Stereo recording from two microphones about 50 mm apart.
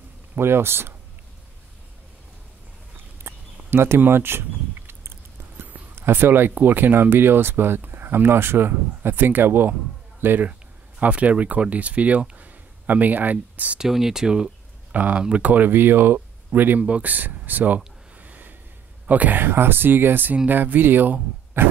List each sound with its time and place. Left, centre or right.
0.4 s speech: right
3.3 s a sound: right
5.9 s speech: right
11.0 s speech: right
13.7 s speech: centre
14.9 s speech: right
16.8 s a sound: right
19.0 s speech: right
19.4 s speech: right